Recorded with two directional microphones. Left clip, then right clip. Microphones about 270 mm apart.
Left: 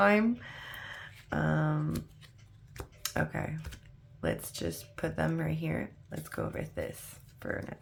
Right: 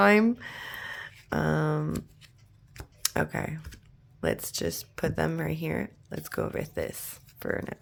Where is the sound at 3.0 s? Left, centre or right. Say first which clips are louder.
Right 5 dB; right.